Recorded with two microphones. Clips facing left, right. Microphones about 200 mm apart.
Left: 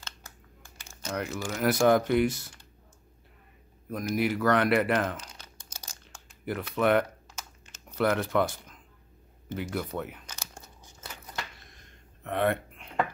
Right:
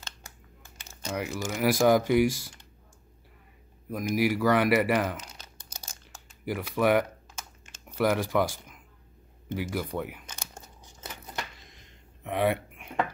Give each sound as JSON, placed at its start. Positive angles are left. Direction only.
{"t": 1.0, "sound": "speech", "side_deg": -10}
{"t": 3.9, "sound": "speech", "side_deg": -10}
{"t": 5.8, "sound": "crumpling", "side_deg": -10}
{"t": 8.0, "sound": "speech", "side_deg": -10}
{"t": 10.2, "sound": "tearing", "side_deg": -20}
{"t": 12.2, "sound": "a sound", "side_deg": -10}